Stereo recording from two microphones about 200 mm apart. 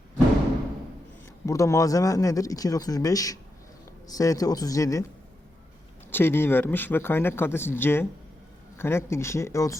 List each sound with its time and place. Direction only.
1.5 s speech: 15° left (ahead or behind)
6.1 s speech: 10° left (ahead or behind)